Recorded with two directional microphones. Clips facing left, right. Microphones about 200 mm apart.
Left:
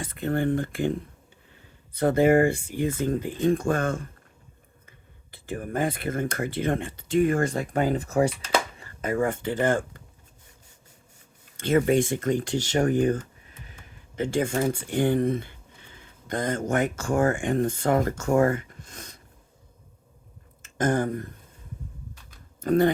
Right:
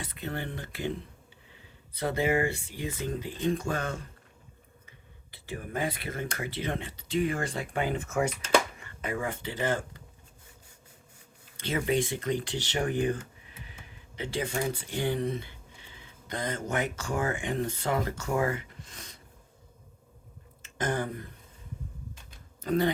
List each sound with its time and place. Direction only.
0.0 s speech: 50° left (ahead or behind)
11.5 s speech: 50° left (ahead or behind)
20.6 s a sound: 45° left (ahead or behind)
22.6 s speech: 50° left (ahead or behind)